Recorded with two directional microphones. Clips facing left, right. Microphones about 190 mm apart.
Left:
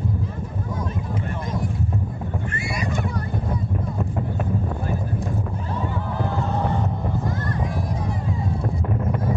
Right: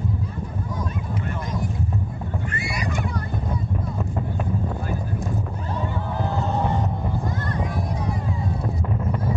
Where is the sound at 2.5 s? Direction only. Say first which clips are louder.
Left 1 dB; 25° left (ahead or behind).